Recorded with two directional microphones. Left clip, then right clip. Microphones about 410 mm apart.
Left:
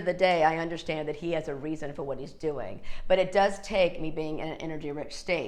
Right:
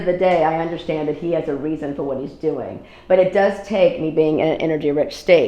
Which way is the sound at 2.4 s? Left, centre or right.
Centre.